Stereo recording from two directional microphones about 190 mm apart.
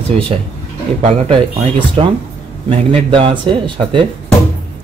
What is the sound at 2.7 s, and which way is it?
Speech, 30° right (ahead or behind).